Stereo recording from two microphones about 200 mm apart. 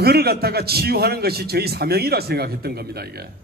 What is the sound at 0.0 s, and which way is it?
A man's voice, 50° right (ahead or behind).